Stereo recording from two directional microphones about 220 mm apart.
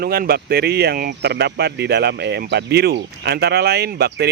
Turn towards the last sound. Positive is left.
turn(degrees=-45)  # may be behind; listen again after turning